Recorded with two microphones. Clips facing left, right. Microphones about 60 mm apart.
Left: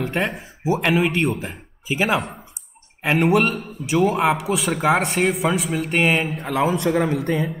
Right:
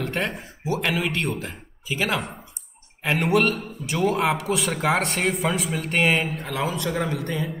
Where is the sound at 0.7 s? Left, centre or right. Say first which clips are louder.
Left 5 dB; centre.